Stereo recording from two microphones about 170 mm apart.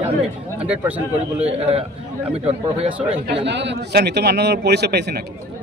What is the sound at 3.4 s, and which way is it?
A man's voice, 90° right.